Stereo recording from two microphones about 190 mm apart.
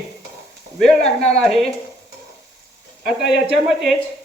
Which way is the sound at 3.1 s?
5° right (ahead or behind).